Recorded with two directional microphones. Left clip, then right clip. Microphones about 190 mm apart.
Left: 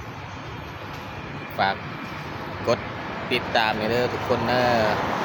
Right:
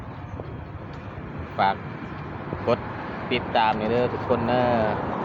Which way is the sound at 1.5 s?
15° left (ahead or behind).